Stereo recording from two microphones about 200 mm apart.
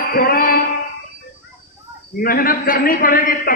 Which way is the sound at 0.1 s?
45° left (ahead or behind).